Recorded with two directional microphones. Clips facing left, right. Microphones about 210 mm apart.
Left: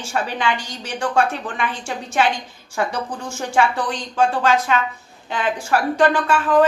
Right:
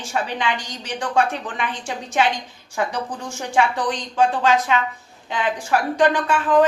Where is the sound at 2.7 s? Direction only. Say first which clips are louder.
Left 1 dB; 15° right (ahead or behind).